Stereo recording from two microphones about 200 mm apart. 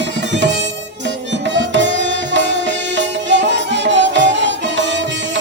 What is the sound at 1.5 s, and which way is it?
Music, 65° right (ahead or behind).